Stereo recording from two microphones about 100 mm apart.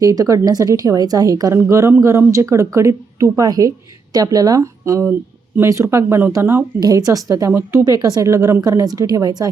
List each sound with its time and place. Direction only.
0.0 s a woman's voice: 35° right (ahead or behind)
6.7 s a woman's voice: 35° right (ahead or behind)
7.5 s speech: 25° right (ahead or behind)
7.9 s a woman's voice: 40° right (ahead or behind)